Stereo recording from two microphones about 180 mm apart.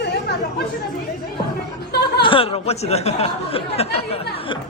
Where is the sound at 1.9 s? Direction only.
65° left (ahead or behind).